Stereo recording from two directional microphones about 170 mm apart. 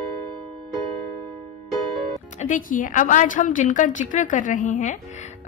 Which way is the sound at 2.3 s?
50° left (ahead or behind).